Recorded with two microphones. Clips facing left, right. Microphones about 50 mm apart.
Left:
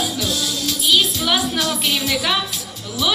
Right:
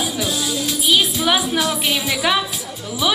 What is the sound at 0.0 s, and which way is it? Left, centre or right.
Music, centre.